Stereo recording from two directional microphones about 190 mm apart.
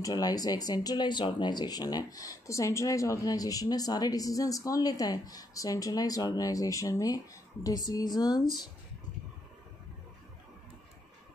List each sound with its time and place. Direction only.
0.0 s speech: 20° left (ahead or behind)